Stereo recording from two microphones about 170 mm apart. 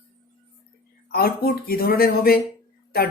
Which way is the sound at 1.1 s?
65° left (ahead or behind).